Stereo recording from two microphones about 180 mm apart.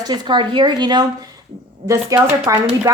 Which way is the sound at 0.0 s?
25° right (ahead or behind).